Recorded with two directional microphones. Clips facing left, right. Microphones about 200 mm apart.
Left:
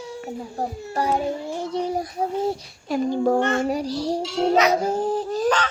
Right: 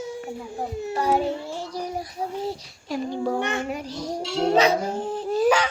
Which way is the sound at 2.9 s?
50° left (ahead or behind).